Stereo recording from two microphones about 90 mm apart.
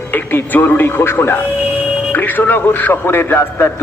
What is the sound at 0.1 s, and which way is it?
A man's voice, 20° left (ahead or behind).